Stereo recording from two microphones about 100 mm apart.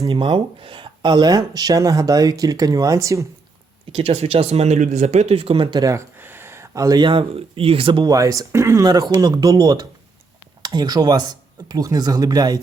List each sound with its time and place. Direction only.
0.1 s speech: 60° right (ahead or behind); by 3.2 s 30° right (ahead or behind)
3.9 s speech: 80° right
5.8 s speech: 30° right (ahead or behind); by 8.0 s 65° right (ahead or behind)
8.0 s speech: 35° right (ahead or behind)
8.9 s speech: 40° right (ahead or behind)